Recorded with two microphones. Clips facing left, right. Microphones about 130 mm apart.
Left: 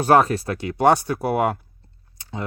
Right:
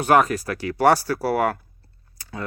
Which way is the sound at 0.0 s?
30° left (ahead or behind).